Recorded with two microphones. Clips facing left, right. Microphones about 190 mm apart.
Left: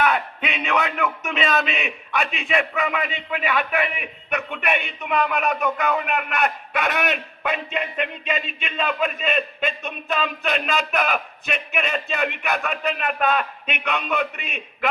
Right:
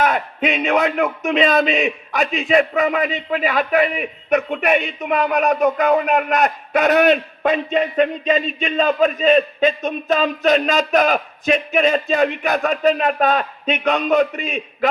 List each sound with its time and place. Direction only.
0.0 s a man's voice: 40° right (ahead or behind)